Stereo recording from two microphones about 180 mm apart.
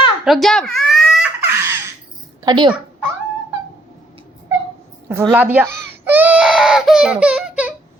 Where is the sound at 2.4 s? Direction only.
25° right (ahead or behind).